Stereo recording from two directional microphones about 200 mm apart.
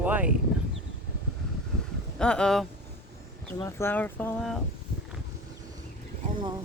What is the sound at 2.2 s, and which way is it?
Speech, 5° left (ahead or behind).